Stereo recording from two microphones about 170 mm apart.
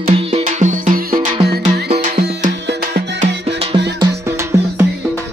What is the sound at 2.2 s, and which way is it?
Music, 80° right.